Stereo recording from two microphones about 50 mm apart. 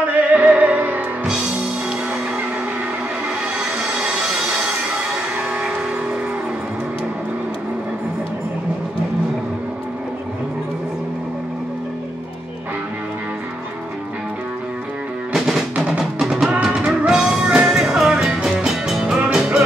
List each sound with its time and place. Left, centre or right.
0.0 s music: right
15.3 s music: centre
15.7 s music: right
16.2 s music: centre
18.1 s music: centre